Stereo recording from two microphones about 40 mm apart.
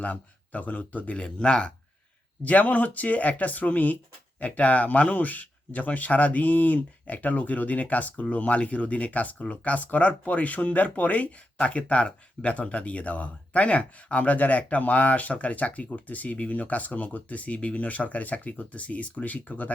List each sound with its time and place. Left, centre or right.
0.0 s speech: left
1.1 s speech: left
2.4 s speech: left